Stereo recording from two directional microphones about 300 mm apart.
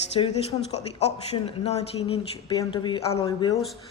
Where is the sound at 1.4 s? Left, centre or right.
Centre.